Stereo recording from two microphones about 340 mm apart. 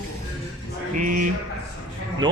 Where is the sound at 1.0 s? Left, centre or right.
Right.